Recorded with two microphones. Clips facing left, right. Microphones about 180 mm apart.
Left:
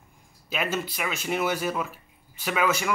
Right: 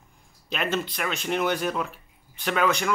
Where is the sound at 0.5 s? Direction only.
5° left (ahead or behind).